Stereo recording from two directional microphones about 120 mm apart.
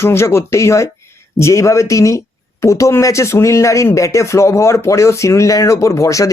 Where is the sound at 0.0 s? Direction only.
20° left (ahead or behind).